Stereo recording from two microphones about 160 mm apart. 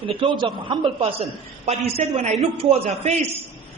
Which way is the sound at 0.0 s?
35° right (ahead or behind).